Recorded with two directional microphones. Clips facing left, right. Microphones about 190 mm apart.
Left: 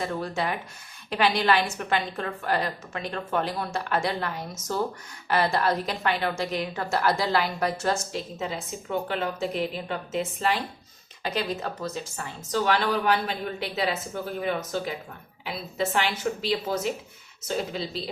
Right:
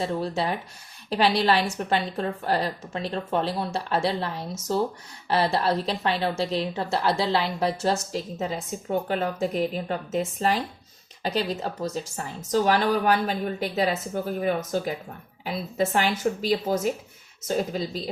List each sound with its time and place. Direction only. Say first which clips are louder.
0.0 s a woman's voice: right 2 dB; 30° right (ahead or behind)